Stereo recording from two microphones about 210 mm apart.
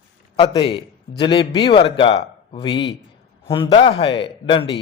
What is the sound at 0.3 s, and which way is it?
A man's voice, 20° left (ahead or behind).